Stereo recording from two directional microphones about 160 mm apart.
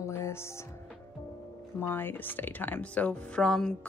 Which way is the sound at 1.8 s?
15° left (ahead or behind).